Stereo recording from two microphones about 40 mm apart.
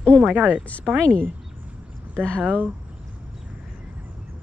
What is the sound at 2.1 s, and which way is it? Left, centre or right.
Speech, left.